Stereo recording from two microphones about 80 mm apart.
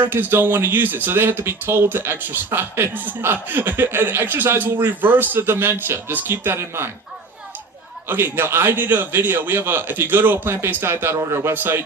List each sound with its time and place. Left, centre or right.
0.0 s a man's voice: right
8.0 s a man's voice: right